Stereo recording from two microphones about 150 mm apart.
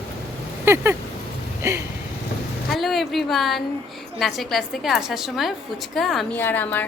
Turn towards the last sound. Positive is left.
turn(degrees=10)  # may be behind; listen again after turning